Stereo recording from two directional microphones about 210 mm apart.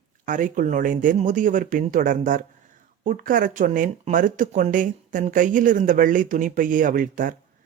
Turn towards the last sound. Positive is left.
turn(degrees=-40)  # may be behind; listen again after turning